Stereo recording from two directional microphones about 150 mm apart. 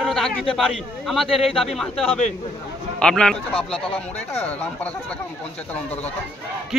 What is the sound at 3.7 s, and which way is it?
Speech, 40° left (ahead or behind).